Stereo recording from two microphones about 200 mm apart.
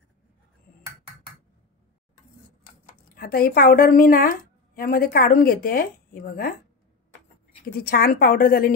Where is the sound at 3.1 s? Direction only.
50° left (ahead or behind).